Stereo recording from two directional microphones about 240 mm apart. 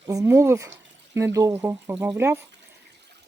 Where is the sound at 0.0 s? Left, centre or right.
Centre.